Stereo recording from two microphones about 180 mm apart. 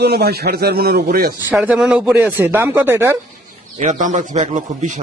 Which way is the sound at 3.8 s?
40° right (ahead or behind).